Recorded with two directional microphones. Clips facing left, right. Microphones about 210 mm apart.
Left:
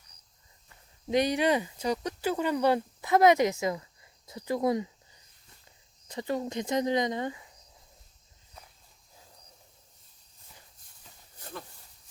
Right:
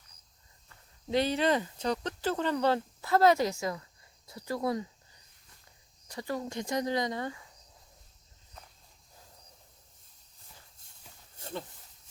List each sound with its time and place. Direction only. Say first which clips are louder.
0.7 s speech: left 2 dB; 15° left (ahead or behind)
6.1 s speech: left 4 dB; 20° left (ahead or behind)
11.3 s a sound: right 4 dB; 25° right (ahead or behind)